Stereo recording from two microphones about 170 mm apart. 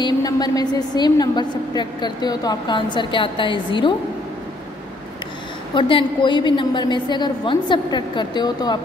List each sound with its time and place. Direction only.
0.0 s a woman's voice: 25° left (ahead or behind)
5.8 s a woman's voice: 30° left (ahead or behind)